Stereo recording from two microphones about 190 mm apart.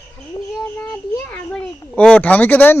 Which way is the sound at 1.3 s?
5° left (ahead or behind).